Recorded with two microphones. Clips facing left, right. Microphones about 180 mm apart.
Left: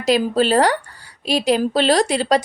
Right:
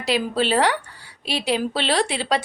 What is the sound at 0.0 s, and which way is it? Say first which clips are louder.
Speech: left 5 dB; 45° left (ahead or behind).